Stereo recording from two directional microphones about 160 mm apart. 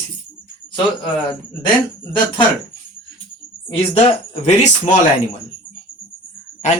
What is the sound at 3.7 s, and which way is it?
Speech, 35° left (ahead or behind).